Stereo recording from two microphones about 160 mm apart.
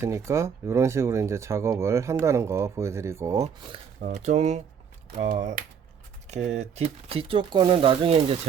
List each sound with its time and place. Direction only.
0.0 s speech: 20° right (ahead or behind)
4.0 s speech: 45° right (ahead or behind)